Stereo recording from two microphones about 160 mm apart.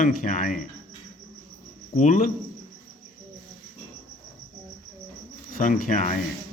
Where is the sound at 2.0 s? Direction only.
50° left (ahead or behind).